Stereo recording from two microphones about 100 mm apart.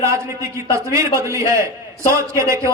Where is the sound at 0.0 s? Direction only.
30° right (ahead or behind).